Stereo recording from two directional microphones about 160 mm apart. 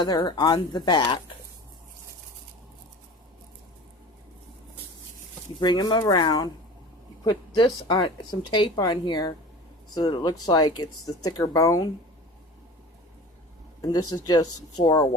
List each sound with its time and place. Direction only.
0.0 s speech: 25° left (ahead or behind)
5.5 s speech: 25° left (ahead or behind)
13.9 s speech: 25° left (ahead or behind)